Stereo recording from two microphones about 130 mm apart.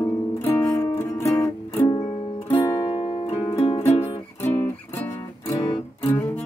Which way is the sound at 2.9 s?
40° left (ahead or behind).